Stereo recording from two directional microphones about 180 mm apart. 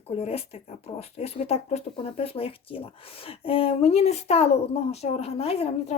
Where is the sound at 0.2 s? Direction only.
35° left (ahead or behind).